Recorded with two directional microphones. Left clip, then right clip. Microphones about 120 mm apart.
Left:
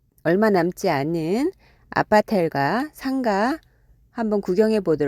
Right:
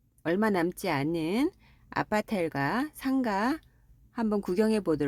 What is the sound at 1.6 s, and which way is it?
Speech, 55° left (ahead or behind).